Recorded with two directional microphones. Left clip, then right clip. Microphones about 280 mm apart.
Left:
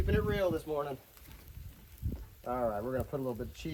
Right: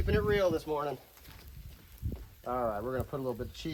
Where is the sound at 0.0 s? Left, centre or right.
Right.